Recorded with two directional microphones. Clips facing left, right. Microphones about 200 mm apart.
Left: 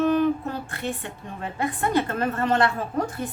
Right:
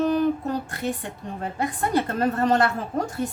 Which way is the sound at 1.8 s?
40° right (ahead or behind).